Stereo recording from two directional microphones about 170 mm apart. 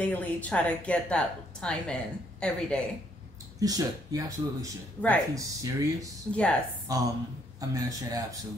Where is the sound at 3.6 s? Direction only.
20° right (ahead or behind).